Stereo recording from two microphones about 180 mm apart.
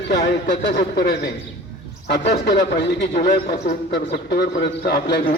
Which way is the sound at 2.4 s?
65° left (ahead or behind).